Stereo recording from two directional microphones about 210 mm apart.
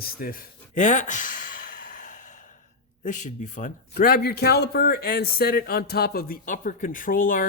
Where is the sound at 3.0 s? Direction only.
35° left (ahead or behind).